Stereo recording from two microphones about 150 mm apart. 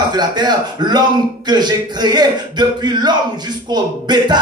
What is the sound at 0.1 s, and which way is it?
Speech, 30° right (ahead or behind).